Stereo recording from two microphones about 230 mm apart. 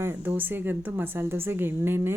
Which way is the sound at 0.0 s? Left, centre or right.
Centre.